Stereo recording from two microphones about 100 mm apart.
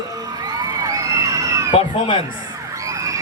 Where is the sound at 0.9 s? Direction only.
35° right (ahead or behind).